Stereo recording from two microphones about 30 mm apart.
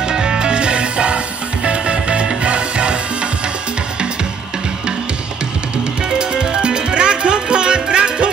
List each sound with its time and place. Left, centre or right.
0.1 s music: right
6.0 s music: right